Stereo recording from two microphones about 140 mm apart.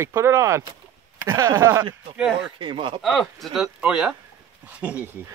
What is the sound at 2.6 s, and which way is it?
Speech, 35° right (ahead or behind).